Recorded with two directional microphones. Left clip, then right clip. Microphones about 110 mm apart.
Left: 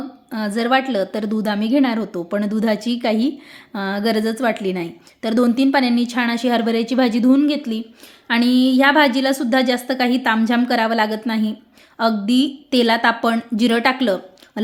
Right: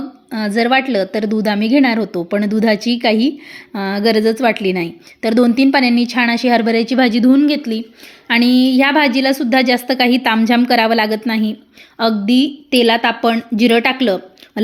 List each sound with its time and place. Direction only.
0.3 s a woman's voice: 35° right (ahead or behind)
12.7 s a woman's voice: 10° right (ahead or behind)